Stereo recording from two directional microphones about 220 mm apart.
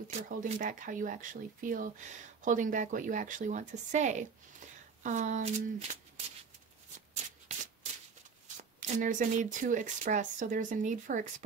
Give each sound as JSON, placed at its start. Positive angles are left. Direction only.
{"t": 0.4, "sound": "speech", "side_deg": -35}
{"t": 7.2, "sound": "rub", "side_deg": -35}
{"t": 8.7, "sound": "speech", "side_deg": -35}